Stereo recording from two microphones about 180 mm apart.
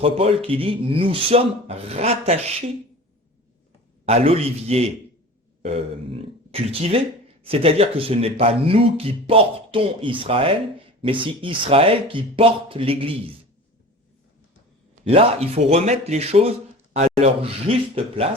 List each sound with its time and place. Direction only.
0.0 s speech: 30° right (ahead or behind)
4.0 s speech: 35° right (ahead or behind)
15.0 s speech: 35° right (ahead or behind)